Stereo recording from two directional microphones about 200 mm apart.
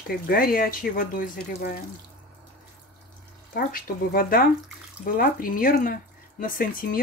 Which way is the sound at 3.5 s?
50° left (ahead or behind).